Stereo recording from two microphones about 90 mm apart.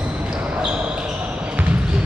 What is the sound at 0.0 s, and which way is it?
Basketball bounce, 10° right (ahead or behind).